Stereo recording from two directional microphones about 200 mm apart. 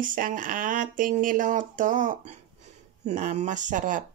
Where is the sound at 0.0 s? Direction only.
40° right (ahead or behind).